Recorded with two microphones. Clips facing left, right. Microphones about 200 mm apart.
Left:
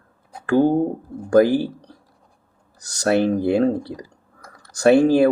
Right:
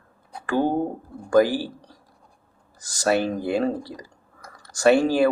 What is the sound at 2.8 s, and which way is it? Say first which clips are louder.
Speech: left 3 dB; 65° left (ahead or behind).